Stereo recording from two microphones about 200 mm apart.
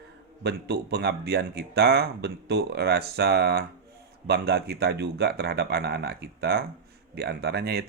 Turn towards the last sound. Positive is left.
turn(degrees=-55)  # may be behind; listen again after turning